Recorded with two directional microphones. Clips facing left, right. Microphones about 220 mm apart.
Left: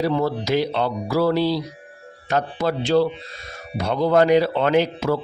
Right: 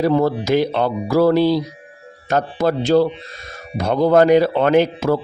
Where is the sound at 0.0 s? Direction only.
50° right (ahead or behind).